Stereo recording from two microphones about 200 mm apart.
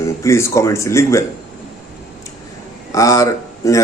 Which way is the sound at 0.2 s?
15° left (ahead or behind).